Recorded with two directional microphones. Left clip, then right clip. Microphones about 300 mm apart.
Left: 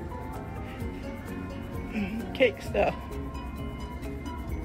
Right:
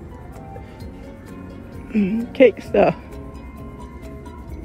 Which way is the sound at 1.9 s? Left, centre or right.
Right.